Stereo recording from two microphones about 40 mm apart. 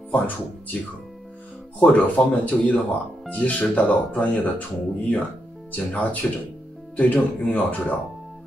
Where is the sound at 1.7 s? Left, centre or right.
Left.